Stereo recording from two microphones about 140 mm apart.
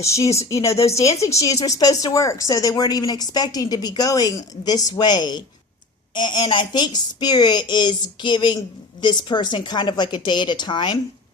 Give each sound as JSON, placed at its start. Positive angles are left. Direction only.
{"t": 0.0, "sound": "a woman's voice", "side_deg": 20}